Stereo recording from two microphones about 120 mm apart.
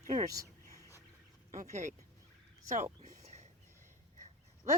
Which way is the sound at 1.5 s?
90° right.